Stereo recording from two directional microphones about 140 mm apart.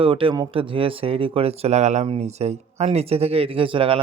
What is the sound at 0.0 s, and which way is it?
Speech, 40° right (ahead or behind).